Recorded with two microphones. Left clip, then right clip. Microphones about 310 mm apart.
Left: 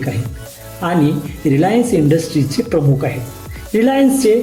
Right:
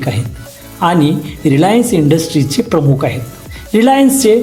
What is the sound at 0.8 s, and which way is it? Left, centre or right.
Speech, centre.